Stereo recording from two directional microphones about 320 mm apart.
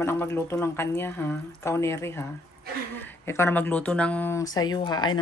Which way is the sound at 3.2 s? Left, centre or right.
Centre.